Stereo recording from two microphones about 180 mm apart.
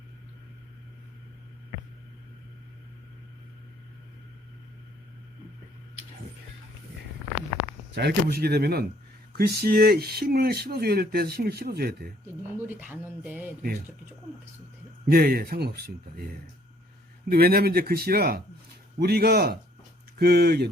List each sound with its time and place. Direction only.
7.9 s speech: 65° right (ahead or behind)
12.2 s speech: 10° right (ahead or behind)
15.1 s speech: 60° right (ahead or behind)